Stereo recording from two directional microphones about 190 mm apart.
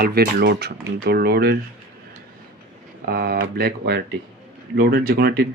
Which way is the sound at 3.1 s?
55° right (ahead or behind).